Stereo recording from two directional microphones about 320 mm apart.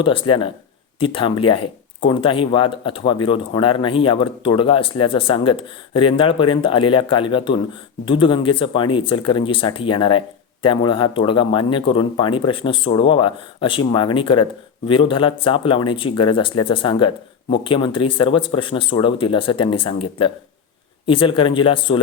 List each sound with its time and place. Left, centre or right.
0.0 s speech: centre